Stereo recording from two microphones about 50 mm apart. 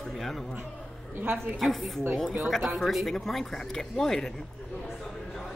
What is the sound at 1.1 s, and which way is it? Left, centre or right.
Speech, right.